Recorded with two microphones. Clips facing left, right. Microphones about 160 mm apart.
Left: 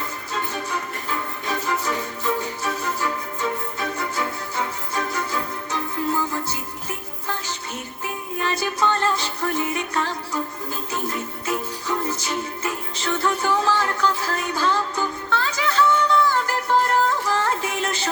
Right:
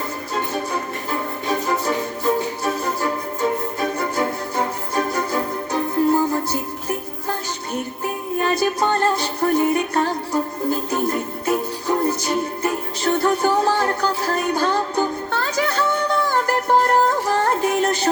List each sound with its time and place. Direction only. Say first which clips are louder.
0.3 s music: right 4 dB; 35° right (ahead or behind)
8.6 s music: right 1 dB; 50° right (ahead or behind)
12.0 s music: right 6 dB; 55° right (ahead or behind)
13.0 s music: right 5 dB; 35° right (ahead or behind)
14.6 s music: right 3 dB; 45° right (ahead or behind)